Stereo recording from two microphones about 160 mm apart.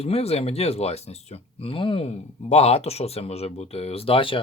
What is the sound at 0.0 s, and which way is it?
Speech, 40° left (ahead or behind).